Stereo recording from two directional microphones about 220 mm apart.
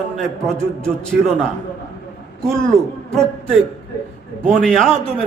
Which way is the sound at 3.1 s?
Centre (ahead or behind).